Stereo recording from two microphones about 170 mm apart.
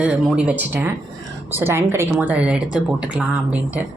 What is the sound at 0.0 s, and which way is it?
Speech, 5° right (ahead or behind).